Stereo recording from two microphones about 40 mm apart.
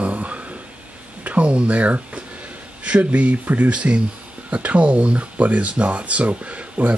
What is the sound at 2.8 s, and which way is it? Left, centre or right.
Speech, right.